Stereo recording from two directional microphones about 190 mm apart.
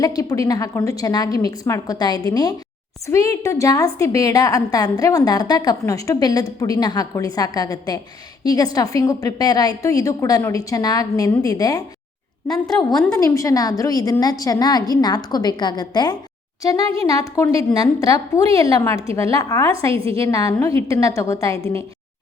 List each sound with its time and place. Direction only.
0.0 s a woman's voice: 20° left (ahead or behind)
12.5 s a woman's voice: centre (ahead or behind)
13.1 s a woman's voice: 15° left (ahead or behind)
16.8 s speech: 30° right (ahead or behind)
17.6 s a woman's voice: 20° left (ahead or behind)
19.9 s a woman's voice: 30° right (ahead or behind)
20.2 s a woman's voice: 15° left (ahead or behind)